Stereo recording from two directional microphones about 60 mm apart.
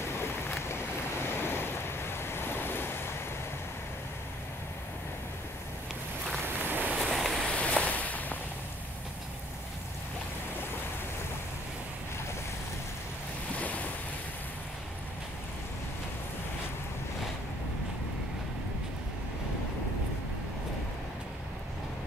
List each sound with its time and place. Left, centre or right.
0.2 s boat: left
1.3 s waves: left
6.4 s boat: right
7.0 s vehicle: centre
7.4 s a sound: left
13.6 s waves: left